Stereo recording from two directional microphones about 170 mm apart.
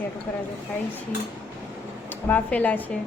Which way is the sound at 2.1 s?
10° left (ahead or behind).